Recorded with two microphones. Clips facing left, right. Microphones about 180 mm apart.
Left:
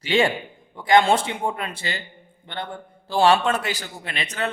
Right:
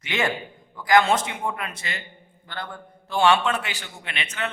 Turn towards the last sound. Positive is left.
turn(degrees=35)  # may be behind; listen again after turning